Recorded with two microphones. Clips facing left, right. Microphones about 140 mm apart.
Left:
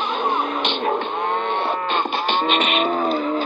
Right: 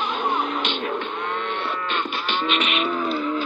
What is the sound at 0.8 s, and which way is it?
Music, 45° left (ahead or behind).